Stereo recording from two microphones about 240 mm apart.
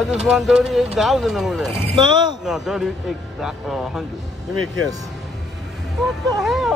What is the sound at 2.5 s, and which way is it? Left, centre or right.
Speech, centre.